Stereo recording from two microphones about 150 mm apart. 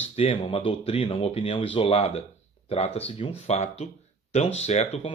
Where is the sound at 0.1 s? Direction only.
40° left (ahead or behind).